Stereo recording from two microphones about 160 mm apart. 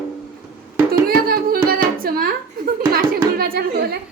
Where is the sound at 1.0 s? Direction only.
70° right (ahead or behind).